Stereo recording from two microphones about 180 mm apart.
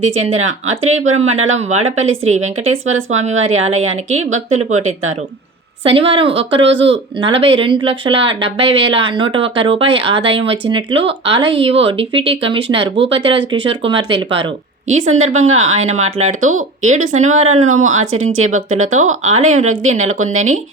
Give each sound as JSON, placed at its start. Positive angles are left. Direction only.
{"t": 0.2, "sound": "speech", "side_deg": -40}
{"t": 6.6, "sound": "speech", "side_deg": -85}
{"t": 6.9, "sound": "speech", "side_deg": -30}
{"t": 15.1, "sound": "speech", "side_deg": -40}